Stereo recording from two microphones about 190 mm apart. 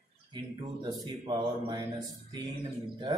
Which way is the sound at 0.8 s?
25° right (ahead or behind).